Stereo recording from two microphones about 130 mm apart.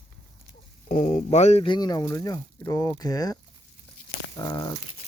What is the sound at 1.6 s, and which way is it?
Speech, 35° left (ahead or behind).